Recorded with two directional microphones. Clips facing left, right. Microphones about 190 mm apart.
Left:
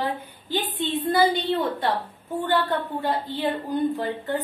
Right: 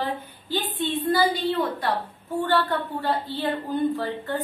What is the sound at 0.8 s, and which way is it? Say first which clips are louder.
A woman's voice: left 1 dB; 25° left (ahead or behind).